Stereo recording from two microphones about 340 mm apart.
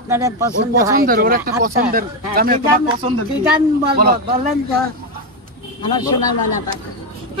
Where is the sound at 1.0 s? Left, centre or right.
Right.